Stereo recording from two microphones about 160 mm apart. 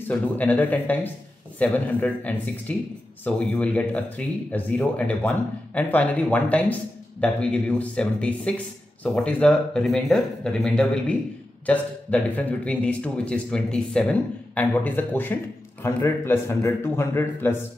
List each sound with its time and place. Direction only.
0.1 s speech: 10° left (ahead or behind)